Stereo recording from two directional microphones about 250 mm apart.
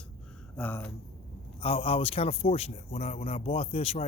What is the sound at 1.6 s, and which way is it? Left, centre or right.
A man's voice, left.